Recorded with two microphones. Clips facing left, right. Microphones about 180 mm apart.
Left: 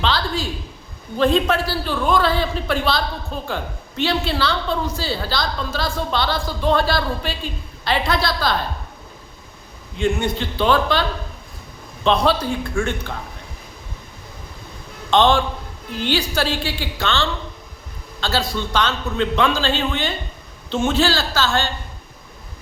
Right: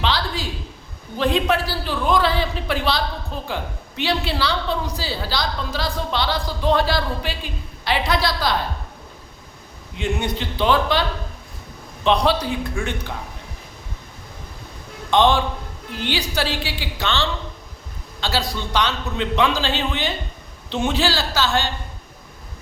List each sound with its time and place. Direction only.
0.0 s a sound: 15° right (ahead or behind)
1.2 s a man's voice: 15° right (ahead or behind)
10.0 s a man's voice: 15° right (ahead or behind)
12.0 s a man's voice: 15° right (ahead or behind)
15.1 s a man's voice: 15° right (ahead or behind)